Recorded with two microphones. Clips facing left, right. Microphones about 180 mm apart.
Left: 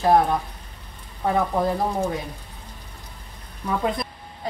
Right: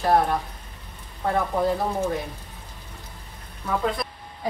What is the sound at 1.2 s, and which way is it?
Speech, 15° left (ahead or behind).